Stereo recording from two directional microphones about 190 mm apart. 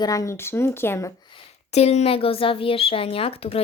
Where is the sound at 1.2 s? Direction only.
30° left (ahead or behind).